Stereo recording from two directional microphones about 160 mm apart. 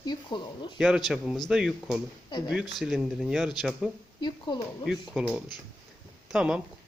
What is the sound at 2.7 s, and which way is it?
Speech, centre (ahead or behind).